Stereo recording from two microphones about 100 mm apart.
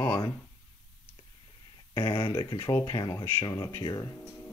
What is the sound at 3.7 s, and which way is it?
Speech, 45° left (ahead or behind).